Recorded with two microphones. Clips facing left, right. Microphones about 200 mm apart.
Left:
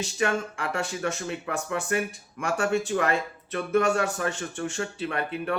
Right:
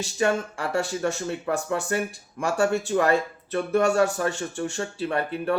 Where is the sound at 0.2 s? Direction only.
35° right (ahead or behind).